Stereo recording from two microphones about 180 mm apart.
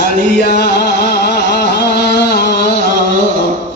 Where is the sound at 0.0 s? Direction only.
60° left (ahead or behind).